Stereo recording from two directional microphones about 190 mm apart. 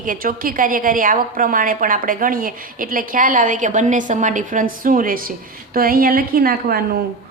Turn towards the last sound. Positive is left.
turn(degrees=-55)  # may be behind; listen again after turning